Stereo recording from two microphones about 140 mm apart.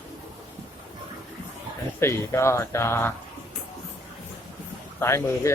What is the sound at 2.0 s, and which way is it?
Speech, 20° left (ahead or behind).